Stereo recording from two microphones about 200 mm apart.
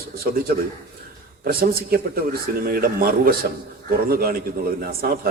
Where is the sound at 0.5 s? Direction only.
50° right (ahead or behind).